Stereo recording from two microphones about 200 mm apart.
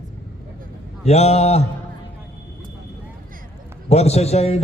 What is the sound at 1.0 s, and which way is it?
Speech, 30° left (ahead or behind).